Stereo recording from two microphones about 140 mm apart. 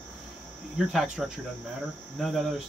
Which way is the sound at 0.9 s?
Centre (ahead or behind).